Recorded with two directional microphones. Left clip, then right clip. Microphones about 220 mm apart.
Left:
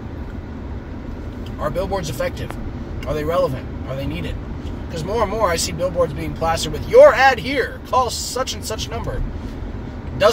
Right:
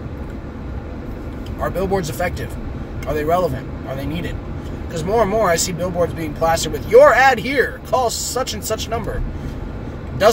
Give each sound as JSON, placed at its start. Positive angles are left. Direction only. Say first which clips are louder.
{"t": 1.6, "sound": "speech", "louder": "right 2 dB", "side_deg": -15}
{"t": 4.9, "sound": "speech", "louder": "right 4 dB", "side_deg": -20}